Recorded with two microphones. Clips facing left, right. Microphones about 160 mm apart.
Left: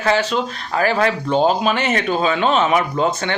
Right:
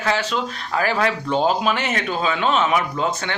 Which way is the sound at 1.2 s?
25° left (ahead or behind).